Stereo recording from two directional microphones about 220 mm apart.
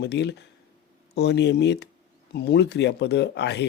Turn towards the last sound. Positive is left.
turn(degrees=50)  # may be behind; listen again after turning